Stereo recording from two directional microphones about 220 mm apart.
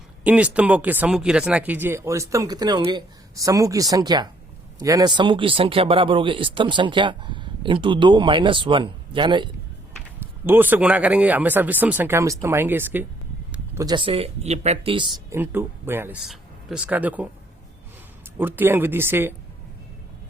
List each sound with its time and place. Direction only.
0.3 s speech: 5° right (ahead or behind); by 9.5 s 20° right (ahead or behind)
10.4 s speech: 10° right (ahead or behind)
18.3 s speech: 10° right (ahead or behind)